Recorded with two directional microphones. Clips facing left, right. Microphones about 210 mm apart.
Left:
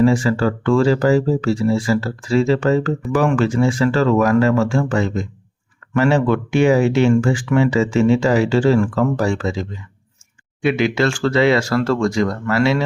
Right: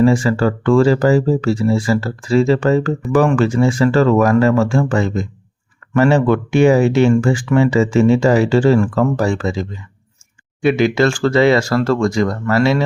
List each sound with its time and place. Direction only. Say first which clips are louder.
0.0 s speech: right 2 dB; 45° right (ahead or behind)
10.6 s speech: right 3 dB; 40° right (ahead or behind)